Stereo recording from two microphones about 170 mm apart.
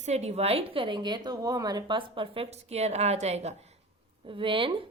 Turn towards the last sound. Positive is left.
turn(degrees=-30)  # may be behind; listen again after turning